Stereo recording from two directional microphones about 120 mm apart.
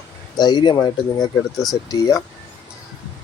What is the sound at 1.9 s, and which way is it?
Speech, 30° left (ahead or behind).